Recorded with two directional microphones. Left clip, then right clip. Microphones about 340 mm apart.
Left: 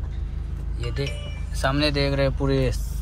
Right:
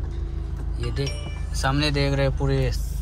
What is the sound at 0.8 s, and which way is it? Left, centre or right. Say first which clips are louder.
Speech: even; centre.